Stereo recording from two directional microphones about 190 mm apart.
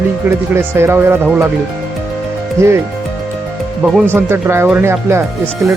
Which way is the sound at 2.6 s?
15° right (ahead or behind).